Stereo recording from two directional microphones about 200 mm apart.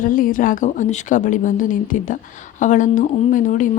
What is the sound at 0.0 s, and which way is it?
Speech, 45° left (ahead or behind).